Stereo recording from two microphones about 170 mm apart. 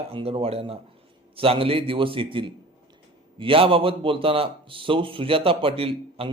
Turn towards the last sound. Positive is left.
turn(degrees=-35)  # may be behind; listen again after turning